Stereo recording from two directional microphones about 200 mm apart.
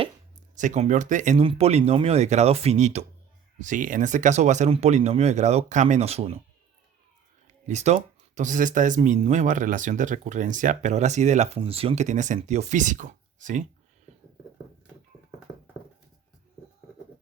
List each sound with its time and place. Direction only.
0.5 s speech: 40° right (ahead or behind)
7.4 s speech: 35° right (ahead or behind)